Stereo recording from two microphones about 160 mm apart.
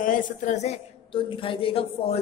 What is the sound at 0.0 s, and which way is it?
A woman's voice, 55° left (ahead or behind).